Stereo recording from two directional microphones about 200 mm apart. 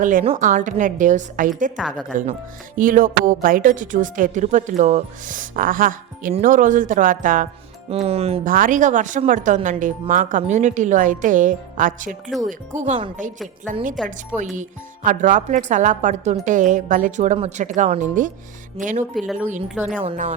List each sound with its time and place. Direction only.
0.0 s speech: 40° right (ahead or behind)
1.7 s speech: 5° right (ahead or behind)
2.7 s speech: 45° right (ahead or behind)
8.0 s speech: 30° right (ahead or behind)
8.4 s speech: 45° right (ahead or behind)
14.3 s speech: 40° right (ahead or behind)
19.1 s speech: centre (ahead or behind)
20.1 s speech: 40° right (ahead or behind)